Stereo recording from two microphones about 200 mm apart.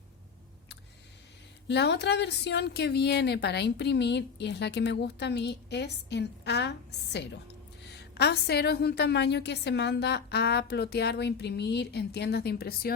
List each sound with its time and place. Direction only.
1.6 s a woman's voice: 60° left (ahead or behind)